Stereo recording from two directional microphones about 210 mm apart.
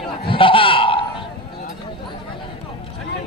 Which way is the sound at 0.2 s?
25° left (ahead or behind).